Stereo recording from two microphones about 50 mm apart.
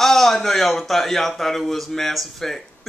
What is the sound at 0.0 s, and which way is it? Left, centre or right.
Speech, centre.